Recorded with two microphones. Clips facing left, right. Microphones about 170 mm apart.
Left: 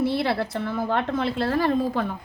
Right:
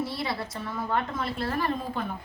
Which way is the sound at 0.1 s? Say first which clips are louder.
Left 8 dB; 65° left (ahead or behind).